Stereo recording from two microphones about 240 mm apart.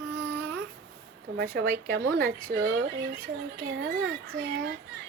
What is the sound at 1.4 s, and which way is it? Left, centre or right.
Speech, right.